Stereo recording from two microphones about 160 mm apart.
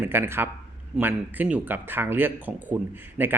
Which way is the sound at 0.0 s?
15° right (ahead or behind).